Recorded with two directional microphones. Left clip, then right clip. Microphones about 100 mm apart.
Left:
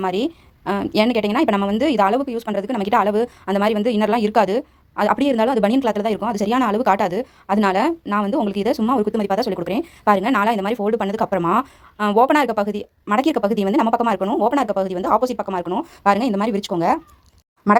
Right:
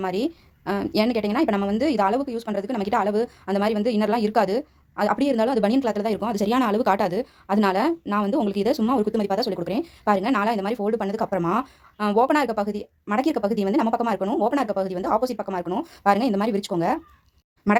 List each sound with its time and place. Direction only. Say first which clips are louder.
0.0 s a woman's voice: left 4 dB; 40° left (ahead or behind)
6.1 s a woman's voice: left 3 dB; 15° left (ahead or behind)
9.3 s a woman's voice: left 4 dB; 35° left (ahead or behind)
14.2 s speech: left 4 dB; 30° left (ahead or behind)
15.8 s speech: left 2 dB; 30° left (ahead or behind)